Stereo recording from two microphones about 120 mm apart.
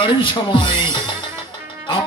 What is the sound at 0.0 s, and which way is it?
Speech, 45° left (ahead or behind).